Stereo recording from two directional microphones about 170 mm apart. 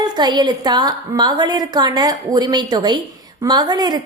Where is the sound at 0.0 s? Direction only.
25° right (ahead or behind).